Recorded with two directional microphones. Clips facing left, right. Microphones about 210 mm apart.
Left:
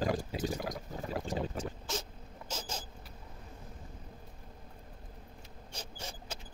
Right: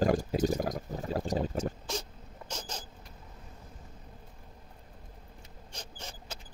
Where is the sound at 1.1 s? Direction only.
40° right (ahead or behind).